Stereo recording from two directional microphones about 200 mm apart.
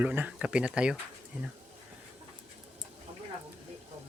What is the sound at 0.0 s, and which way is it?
Speech, 10° right (ahead or behind).